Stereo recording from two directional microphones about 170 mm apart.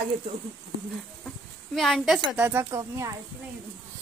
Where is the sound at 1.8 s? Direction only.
Centre (ahead or behind).